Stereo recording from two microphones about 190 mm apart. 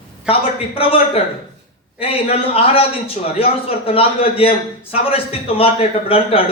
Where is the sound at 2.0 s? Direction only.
30° left (ahead or behind).